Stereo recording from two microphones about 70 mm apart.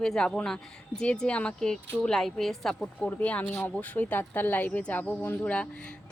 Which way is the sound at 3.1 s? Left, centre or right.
Left.